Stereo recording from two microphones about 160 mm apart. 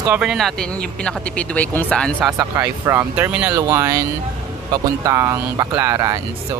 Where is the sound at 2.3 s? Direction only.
15° right (ahead or behind).